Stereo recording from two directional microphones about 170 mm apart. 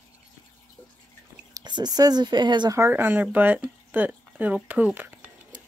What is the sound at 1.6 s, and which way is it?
Speech, 25° right (ahead or behind).